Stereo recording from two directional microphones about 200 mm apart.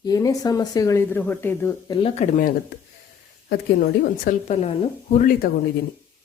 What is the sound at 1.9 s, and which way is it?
Speech, 25° left (ahead or behind).